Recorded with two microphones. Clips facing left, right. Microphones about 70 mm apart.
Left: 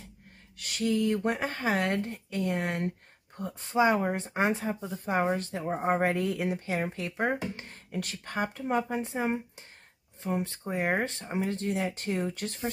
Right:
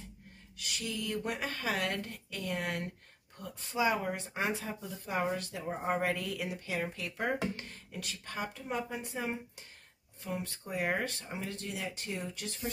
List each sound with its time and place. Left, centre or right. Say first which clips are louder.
0.6 s speech: left 11 dB; left
7.9 s speech: left 8 dB; left